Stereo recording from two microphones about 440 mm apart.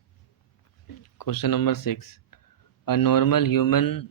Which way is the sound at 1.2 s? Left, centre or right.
Left.